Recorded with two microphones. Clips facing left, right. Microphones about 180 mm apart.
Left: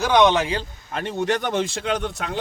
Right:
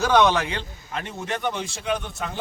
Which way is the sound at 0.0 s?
15° left (ahead or behind).